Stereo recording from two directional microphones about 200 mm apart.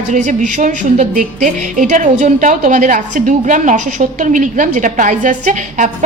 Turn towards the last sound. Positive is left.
turn(degrees=-40)  # may be behind; listen again after turning